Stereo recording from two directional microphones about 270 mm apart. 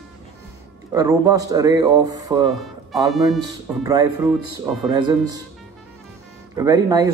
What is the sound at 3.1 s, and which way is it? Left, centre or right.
Speech, centre.